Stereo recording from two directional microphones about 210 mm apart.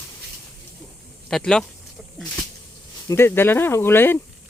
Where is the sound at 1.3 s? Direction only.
Centre (ahead or behind).